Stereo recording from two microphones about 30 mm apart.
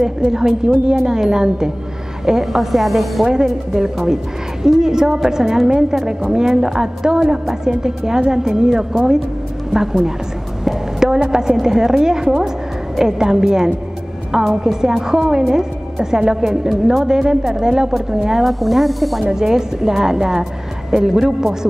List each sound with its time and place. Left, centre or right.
0.3 s speech: centre
3.7 s speech: centre
11.1 s a woman's voice: right
16.6 s speech: centre
17.0 s speech: right
17.4 s speech: centre
17.6 s speech: right
18.4 s speech: centre
19.2 s speech: centre